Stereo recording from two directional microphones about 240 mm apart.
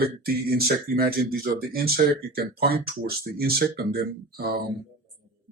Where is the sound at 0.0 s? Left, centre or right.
Right.